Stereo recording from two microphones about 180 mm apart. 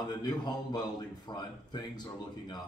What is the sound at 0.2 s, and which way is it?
A man's voice, 25° left (ahead or behind).